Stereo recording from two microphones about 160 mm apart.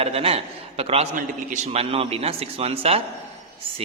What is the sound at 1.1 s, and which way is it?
A man's voice, 50° right (ahead or behind).